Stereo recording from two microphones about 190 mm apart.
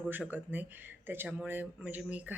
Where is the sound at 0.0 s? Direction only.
10° right (ahead or behind).